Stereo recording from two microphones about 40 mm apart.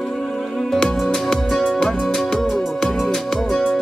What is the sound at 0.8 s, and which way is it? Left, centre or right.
Music, centre.